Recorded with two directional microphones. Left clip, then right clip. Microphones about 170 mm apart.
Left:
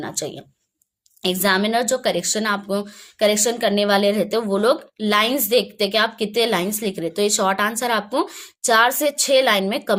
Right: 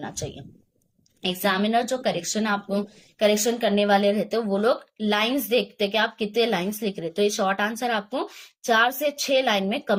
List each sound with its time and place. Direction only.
0.0 s speech: 45° left (ahead or behind)